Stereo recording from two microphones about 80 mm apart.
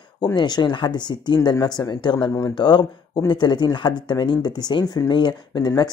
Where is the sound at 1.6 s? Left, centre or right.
Left.